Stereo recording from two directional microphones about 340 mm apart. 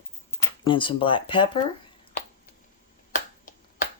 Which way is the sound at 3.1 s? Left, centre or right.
Left.